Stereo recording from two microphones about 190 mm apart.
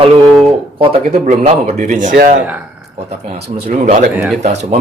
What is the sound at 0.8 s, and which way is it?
Speech, 35° right (ahead or behind).